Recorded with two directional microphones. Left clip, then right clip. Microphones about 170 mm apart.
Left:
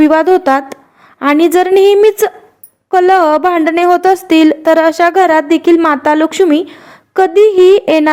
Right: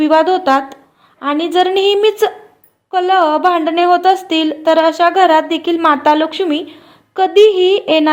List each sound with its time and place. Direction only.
0.0 s speech: 35° left (ahead or behind)